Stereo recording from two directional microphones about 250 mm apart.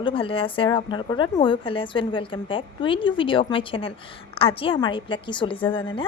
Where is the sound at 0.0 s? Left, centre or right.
Left.